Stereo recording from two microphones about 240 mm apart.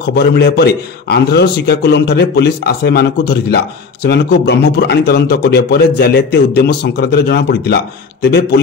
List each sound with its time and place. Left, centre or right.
0.0 s a man's voice: left